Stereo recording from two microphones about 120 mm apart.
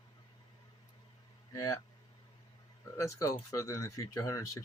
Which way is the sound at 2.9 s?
25° left (ahead or behind).